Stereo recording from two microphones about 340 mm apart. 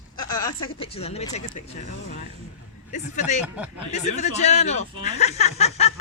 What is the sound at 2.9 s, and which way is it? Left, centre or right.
Speech, left.